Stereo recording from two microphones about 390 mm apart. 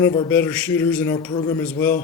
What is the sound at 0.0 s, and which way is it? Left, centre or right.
A man's voice, centre.